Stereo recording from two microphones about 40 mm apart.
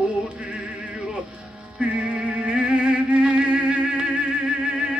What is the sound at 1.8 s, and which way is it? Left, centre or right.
Music, right.